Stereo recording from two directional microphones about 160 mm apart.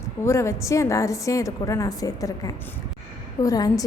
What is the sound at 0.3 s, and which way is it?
A woman's voice, 15° left (ahead or behind).